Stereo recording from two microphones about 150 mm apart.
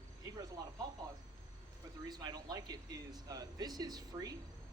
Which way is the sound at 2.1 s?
25° right (ahead or behind).